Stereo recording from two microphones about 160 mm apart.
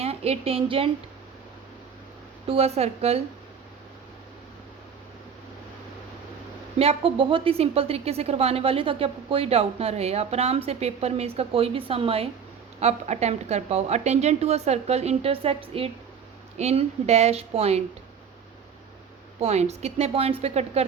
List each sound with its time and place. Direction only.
0.0 s a woman's voice: 40° right (ahead or behind)
2.5 s a woman's voice: 40° right (ahead or behind)
6.7 s a woman's voice: 35° right (ahead or behind)
19.4 s a woman's voice: 40° right (ahead or behind)